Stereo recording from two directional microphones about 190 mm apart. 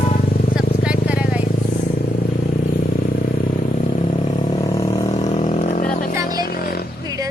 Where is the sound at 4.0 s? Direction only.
30° left (ahead or behind).